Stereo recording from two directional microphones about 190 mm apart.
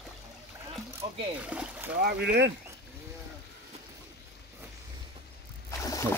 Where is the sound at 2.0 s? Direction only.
55° right (ahead or behind).